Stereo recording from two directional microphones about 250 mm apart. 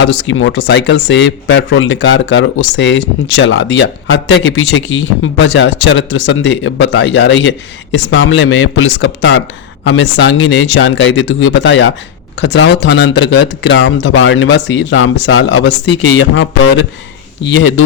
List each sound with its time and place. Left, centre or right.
0.0 s speech: left